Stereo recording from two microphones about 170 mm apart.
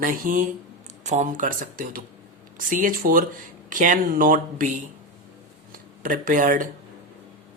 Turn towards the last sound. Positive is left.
turn(degrees=-50)  # may be behind; listen again after turning